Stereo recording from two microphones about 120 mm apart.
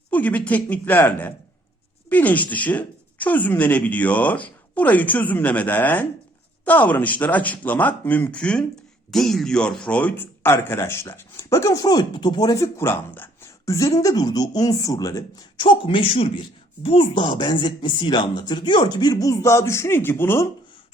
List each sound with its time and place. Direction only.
0.1 s speech: 15° left (ahead or behind); by 15.4 s 30° left (ahead or behind)
15.5 s speech: 45° left (ahead or behind); by 20.5 s 20° left (ahead or behind)